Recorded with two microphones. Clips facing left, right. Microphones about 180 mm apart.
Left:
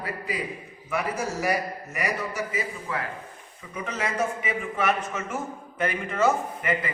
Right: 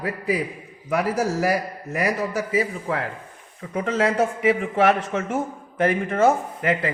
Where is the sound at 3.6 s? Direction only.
90° right.